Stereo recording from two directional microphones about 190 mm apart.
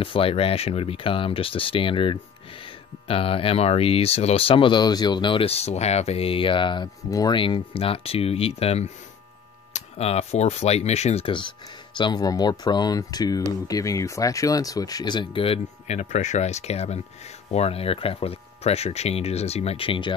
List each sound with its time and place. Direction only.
0.0 s speech: 30° left (ahead or behind)